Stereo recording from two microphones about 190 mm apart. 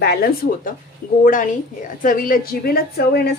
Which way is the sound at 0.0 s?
55° left (ahead or behind).